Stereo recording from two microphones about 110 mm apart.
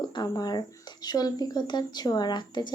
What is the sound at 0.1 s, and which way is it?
Speech, 35° left (ahead or behind).